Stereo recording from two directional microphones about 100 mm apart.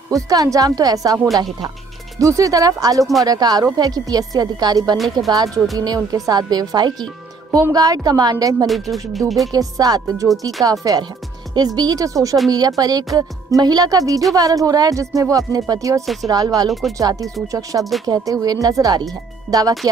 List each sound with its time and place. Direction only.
0.1 s speech: 35° right (ahead or behind)
4.9 s a woman's voice: centre (ahead or behind)
5.8 s speech: 40° right (ahead or behind)
8.6 s a woman's voice: centre (ahead or behind)
9.5 s speech: 40° right (ahead or behind)
16.6 s a woman's voice: centre (ahead or behind)
17.0 s speech: 35° right (ahead or behind)